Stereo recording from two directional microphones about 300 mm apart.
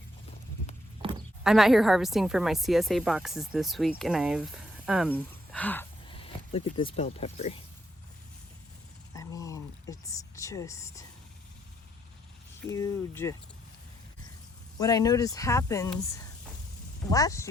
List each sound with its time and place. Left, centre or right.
1.5 s a woman's voice: centre
6.1 s speech: centre
9.1 s a sound: centre
12.7 s speech: centre
14.8 s speech: centre